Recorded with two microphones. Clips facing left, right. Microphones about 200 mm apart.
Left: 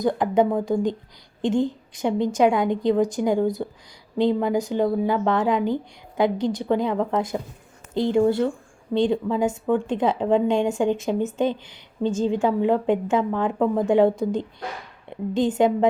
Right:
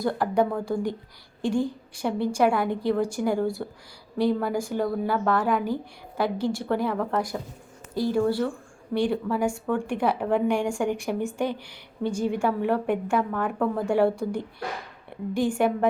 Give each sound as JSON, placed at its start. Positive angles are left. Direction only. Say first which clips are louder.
{"t": 0.0, "sound": "a woman's voice", "louder": "left 4 dB", "side_deg": 20}